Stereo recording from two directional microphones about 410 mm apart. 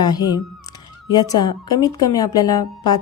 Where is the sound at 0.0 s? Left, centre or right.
Centre.